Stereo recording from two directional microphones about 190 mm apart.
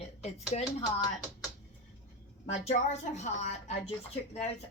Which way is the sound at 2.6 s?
35° left (ahead or behind).